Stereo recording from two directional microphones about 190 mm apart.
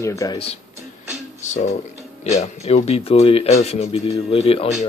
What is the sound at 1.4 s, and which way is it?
Speech, 40° left (ahead or behind).